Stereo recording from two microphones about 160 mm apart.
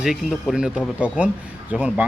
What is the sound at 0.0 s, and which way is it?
Speech, 5° right (ahead or behind).